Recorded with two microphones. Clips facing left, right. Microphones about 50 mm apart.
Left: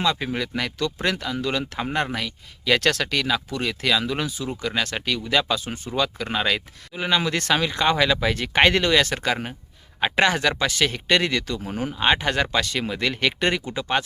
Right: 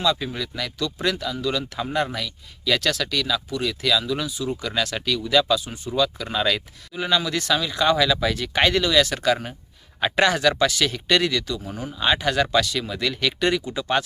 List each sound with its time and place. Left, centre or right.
0.0 s speech: left
5.6 s speech: left
7.2 s speech: left
11.9 s speech: left